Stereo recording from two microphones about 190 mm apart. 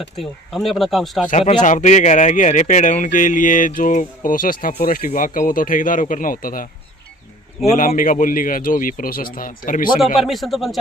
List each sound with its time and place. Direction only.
0.2 s speech: centre (ahead or behind)
1.3 s a man's voice: 35° left (ahead or behind)
7.7 s a man's voice: 45° left (ahead or behind)
10.2 s speech: centre (ahead or behind)